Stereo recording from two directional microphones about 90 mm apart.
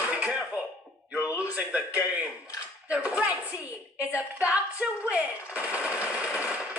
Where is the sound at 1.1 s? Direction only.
15° right (ahead or behind).